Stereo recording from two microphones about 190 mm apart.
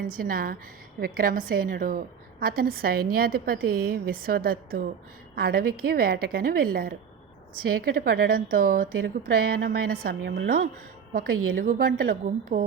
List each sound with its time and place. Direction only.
0.0 s a woman's voice: 50° right (ahead or behind)
7.9 s a woman's voice: 55° right (ahead or behind)